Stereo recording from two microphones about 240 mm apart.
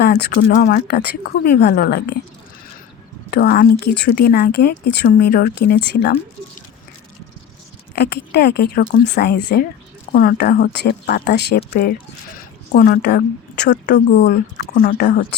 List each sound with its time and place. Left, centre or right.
0.0 s speech: left
3.2 s speech: left
7.9 s speech: left